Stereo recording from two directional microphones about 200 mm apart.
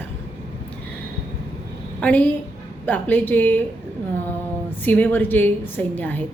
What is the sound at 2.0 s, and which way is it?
Speech, 5° left (ahead or behind).